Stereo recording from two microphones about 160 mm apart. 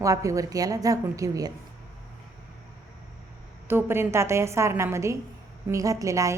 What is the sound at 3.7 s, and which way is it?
A woman's voice, 15° right (ahead or behind).